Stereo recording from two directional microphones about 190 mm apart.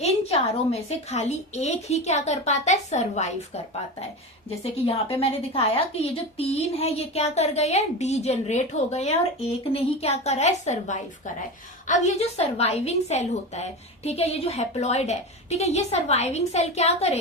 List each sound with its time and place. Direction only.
0.0 s a woman's voice: 35° left (ahead or behind)